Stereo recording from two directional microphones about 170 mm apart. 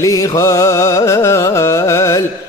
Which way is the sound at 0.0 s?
20° left (ahead or behind).